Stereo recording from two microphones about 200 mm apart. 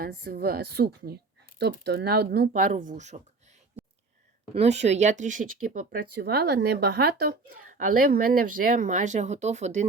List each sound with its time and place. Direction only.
0.0 s speech: 50° right (ahead or behind)
2.5 s speech: 40° right (ahead or behind)
4.5 s speech: 35° right (ahead or behind)